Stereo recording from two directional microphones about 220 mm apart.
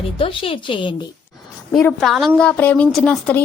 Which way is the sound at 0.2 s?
25° left (ahead or behind).